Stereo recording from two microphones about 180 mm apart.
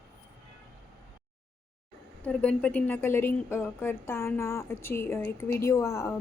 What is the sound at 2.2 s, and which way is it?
A woman's voice, 5° left (ahead or behind).